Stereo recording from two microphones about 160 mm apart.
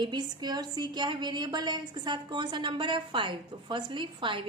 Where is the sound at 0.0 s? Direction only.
25° right (ahead or behind).